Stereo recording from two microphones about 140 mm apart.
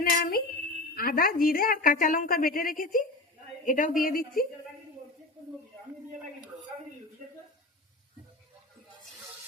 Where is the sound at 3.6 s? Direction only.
70° left (ahead or behind); by 4.5 s 90° left.